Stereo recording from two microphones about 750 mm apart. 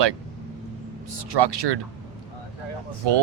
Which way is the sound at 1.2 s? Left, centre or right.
Right.